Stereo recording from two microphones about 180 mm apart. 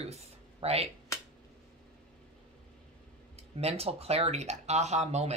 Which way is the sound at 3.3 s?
35° right (ahead or behind).